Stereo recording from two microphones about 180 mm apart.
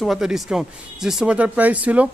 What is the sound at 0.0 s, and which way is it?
Speech, centre (ahead or behind).